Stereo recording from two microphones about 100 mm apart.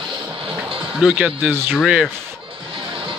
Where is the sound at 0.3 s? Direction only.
65° right (ahead or behind).